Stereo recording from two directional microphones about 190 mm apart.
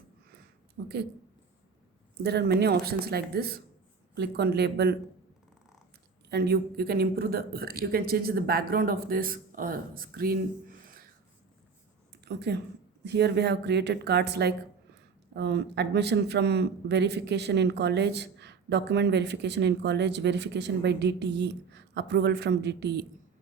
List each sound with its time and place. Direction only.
0.8 s a sound: 60° right (ahead or behind)
2.2 s a man's voice: 60° right (ahead or behind)
6.3 s speech: 55° right (ahead or behind)
12.2 s a woman's voice: 60° right (ahead or behind)